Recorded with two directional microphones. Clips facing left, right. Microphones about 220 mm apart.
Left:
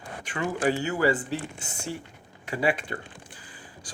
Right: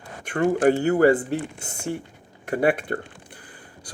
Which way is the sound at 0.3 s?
50° right (ahead or behind).